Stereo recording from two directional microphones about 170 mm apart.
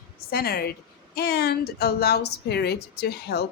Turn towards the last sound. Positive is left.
turn(degrees=70)  # may be behind; listen again after turning